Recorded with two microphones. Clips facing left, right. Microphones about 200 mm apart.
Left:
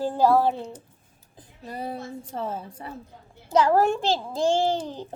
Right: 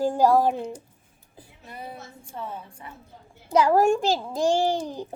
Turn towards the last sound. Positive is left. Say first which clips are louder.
# even
turn(degrees=-10)  # may be behind; listen again after turning